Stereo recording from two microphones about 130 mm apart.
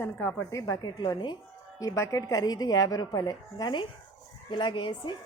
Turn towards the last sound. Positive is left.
turn(degrees=40)  # may be behind; listen again after turning